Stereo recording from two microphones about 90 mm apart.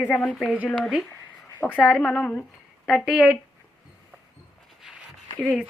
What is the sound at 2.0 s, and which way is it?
Speech, 10° left (ahead or behind).